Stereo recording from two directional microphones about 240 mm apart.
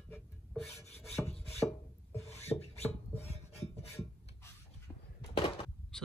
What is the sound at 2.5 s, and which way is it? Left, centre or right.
Beatboxing, left.